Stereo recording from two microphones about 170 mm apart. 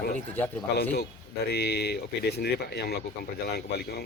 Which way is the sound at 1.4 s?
75° left (ahead or behind).